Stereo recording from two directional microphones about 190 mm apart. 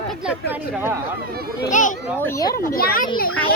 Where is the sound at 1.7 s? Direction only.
40° left (ahead or behind).